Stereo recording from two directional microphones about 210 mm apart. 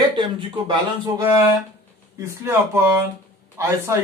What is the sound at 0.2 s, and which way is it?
Speech, 25° right (ahead or behind).